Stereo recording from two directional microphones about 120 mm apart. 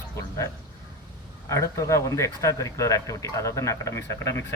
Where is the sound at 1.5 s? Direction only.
25° left (ahead or behind).